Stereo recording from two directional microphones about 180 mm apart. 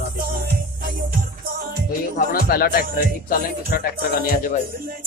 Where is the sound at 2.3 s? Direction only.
60° left (ahead or behind).